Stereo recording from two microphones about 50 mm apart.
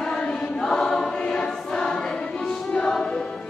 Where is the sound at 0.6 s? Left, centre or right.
Centre.